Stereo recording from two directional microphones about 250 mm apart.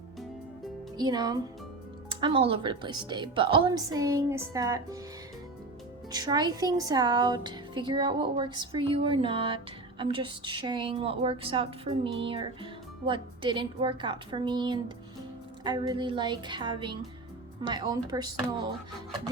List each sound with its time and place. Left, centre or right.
0.9 s a woman's voice: centre
6.1 s a woman's voice: centre